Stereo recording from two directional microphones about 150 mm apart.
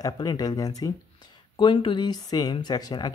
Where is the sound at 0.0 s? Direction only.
25° left (ahead or behind).